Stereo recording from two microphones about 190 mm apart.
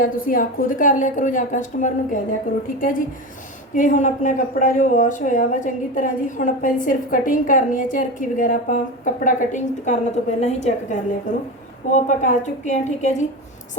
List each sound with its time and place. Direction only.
0.0 s speech: 45° left (ahead or behind)
3.8 s a woman's voice: 40° left (ahead or behind)